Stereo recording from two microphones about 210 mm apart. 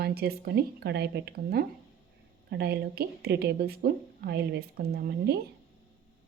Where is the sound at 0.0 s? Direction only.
50° right (ahead or behind).